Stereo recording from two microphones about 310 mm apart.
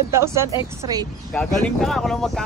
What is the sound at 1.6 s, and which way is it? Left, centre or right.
Speech, centre.